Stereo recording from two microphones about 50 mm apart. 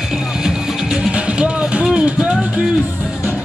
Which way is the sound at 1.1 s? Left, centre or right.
Right.